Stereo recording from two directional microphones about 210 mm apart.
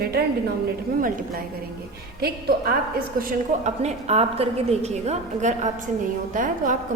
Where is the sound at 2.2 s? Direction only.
50° right (ahead or behind).